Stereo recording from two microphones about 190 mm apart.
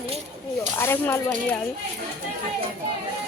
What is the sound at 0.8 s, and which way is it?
Speech, 10° left (ahead or behind).